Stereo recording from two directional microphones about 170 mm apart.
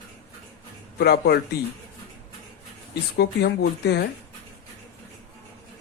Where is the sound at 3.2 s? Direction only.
80° left.